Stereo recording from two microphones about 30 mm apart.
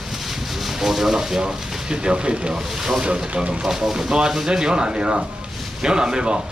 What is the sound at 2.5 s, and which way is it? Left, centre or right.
Speech, centre.